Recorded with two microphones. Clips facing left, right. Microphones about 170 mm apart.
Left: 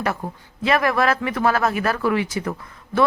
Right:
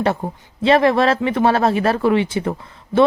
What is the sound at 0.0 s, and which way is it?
Speech, 30° right (ahead or behind).